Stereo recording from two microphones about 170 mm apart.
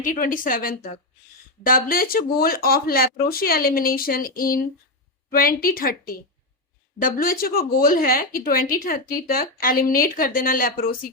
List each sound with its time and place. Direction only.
0.0 s speech: 55° left (ahead or behind)